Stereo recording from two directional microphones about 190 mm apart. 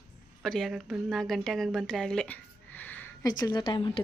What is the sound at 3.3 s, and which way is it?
Speech, 20° left (ahead or behind).